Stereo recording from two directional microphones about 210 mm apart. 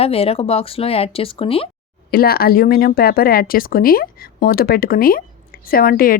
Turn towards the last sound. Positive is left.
turn(degrees=45)  # may be behind; listen again after turning